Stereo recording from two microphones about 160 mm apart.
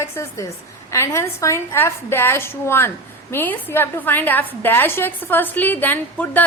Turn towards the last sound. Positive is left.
turn(degrees=10)  # may be behind; listen again after turning